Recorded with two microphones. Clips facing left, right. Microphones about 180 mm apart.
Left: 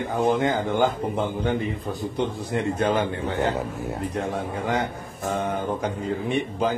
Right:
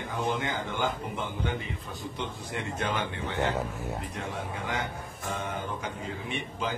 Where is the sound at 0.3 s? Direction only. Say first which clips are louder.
Left 10 dB; 40° left (ahead or behind).